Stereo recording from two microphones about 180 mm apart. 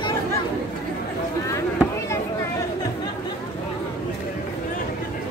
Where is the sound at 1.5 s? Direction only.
15° left (ahead or behind).